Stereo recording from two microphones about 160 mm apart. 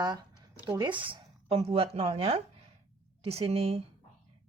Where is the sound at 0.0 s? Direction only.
25° right (ahead or behind).